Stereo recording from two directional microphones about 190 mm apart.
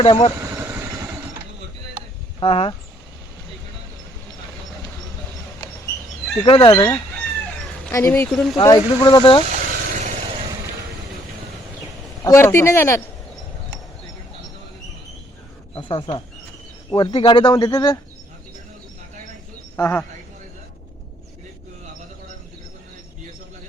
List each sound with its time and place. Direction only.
0.0 s speech: 25° left (ahead or behind)
0.3 s vehicle: 15° right (ahead or behind)
2.4 s speech: 30° left (ahead or behind)
6.4 s speech: 25° left (ahead or behind)
8.3 s speech: centre (ahead or behind)
8.6 s speech: 15° left (ahead or behind)
9.0 s speech: 25° left (ahead or behind)
9.5 s vehicle: 40° right (ahead or behind)
12.2 s speech: 15° left (ahead or behind)
15.7 s speech: 25° left (ahead or behind)
19.7 s speech: 10° left (ahead or behind)